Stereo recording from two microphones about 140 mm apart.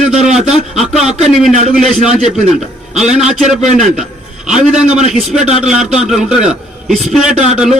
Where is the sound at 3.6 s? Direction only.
55° right (ahead or behind).